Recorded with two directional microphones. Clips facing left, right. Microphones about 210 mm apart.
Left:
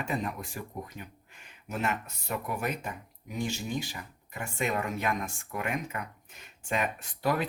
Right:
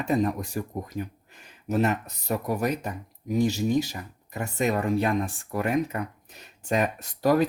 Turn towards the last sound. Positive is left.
turn(degrees=-40)  # may be behind; listen again after turning